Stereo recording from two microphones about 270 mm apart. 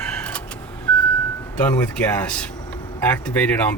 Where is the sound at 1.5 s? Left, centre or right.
Centre.